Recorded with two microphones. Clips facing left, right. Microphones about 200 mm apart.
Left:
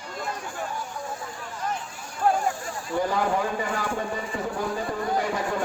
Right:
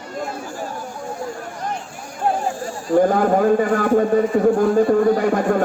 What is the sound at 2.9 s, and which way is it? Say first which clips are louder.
A man's voice: right 10 dB; 50° right (ahead or behind).